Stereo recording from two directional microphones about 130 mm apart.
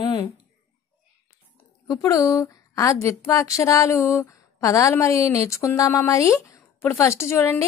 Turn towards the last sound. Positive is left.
turn(degrees=20)  # may be behind; listen again after turning